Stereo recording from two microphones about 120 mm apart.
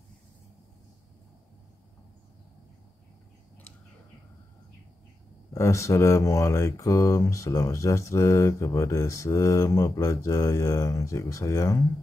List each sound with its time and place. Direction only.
5.5 s speech: 25° left (ahead or behind)